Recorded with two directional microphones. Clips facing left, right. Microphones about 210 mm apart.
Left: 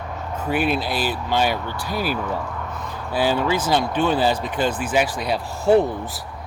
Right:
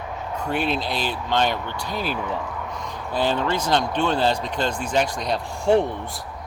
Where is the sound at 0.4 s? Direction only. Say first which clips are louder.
Left 3 dB; 5° left (ahead or behind).